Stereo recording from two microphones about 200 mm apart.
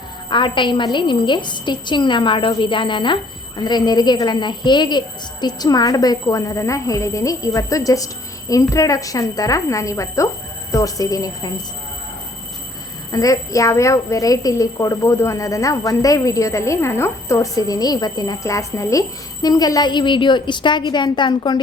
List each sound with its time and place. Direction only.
0.3 s a woman's voice: 25° left (ahead or behind)
13.1 s a woman's voice: 20° left (ahead or behind)